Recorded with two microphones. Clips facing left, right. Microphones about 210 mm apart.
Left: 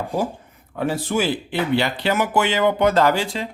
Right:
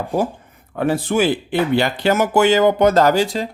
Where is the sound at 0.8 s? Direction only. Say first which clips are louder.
Right 4 dB; 55° right (ahead or behind).